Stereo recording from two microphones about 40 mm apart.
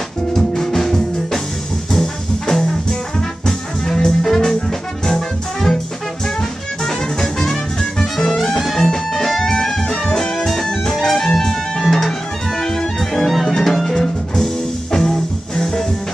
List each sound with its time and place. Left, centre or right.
0.4 s music: centre
5.0 s brass instrument: centre
6.8 s music: centre